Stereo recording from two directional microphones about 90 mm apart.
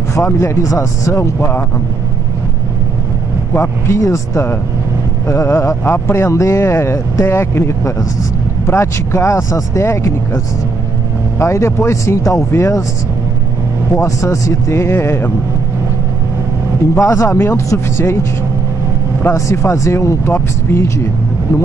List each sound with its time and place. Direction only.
0.1 s speech: 35° left (ahead or behind)
3.5 s speech: 30° left (ahead or behind)
13.9 s speech: 35° left (ahead or behind)
16.9 s speech: 30° left (ahead or behind)
19.2 s speech: 30° left (ahead or behind)